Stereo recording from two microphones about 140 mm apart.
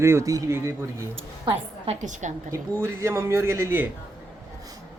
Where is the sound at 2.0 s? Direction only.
60° right (ahead or behind).